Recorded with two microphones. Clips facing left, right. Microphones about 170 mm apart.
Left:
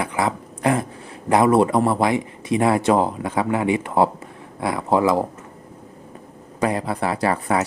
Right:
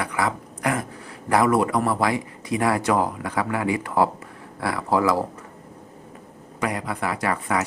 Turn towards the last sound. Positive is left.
turn(degrees=30)  # may be behind; listen again after turning